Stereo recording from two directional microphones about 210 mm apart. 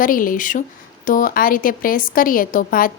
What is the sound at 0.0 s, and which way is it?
A woman's voice, 40° left (ahead or behind).